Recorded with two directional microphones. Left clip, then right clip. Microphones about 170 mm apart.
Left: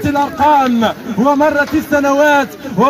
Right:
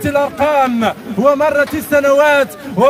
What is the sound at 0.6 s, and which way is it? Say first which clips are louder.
A man's voice: left 1 dB; 35° right (ahead or behind).